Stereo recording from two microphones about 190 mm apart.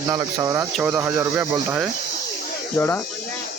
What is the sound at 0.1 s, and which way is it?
Speech, 20° right (ahead or behind).